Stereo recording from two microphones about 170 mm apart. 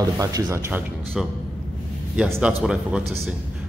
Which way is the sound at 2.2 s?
5° right (ahead or behind).